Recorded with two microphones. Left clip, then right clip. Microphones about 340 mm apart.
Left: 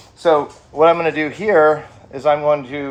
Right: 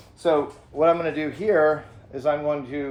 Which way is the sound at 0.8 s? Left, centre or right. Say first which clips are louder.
Left 7 dB; centre.